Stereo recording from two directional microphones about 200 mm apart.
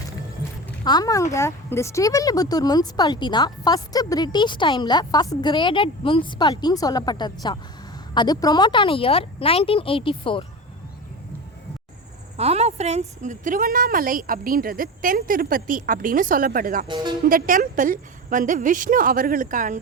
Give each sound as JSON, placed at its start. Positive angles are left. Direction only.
{"t": 0.9, "sound": "speech", "side_deg": 20}
{"t": 12.4, "sound": "a woman's voice", "side_deg": -30}
{"t": 16.8, "sound": "speech", "side_deg": -20}
{"t": 17.2, "sound": "a woman's voice", "side_deg": -45}